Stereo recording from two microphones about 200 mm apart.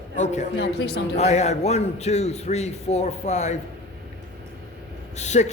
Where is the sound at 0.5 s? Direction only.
60° left (ahead or behind).